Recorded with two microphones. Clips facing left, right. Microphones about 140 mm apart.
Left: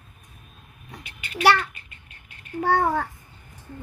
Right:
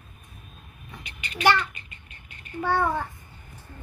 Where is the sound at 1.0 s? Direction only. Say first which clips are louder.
Left 4 dB; 5° left (ahead or behind).